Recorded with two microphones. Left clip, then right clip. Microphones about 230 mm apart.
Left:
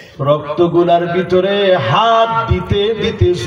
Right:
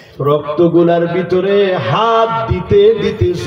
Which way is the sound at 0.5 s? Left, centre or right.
Left.